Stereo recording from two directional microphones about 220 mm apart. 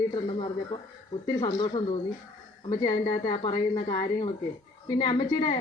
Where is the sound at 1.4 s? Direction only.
20° left (ahead or behind).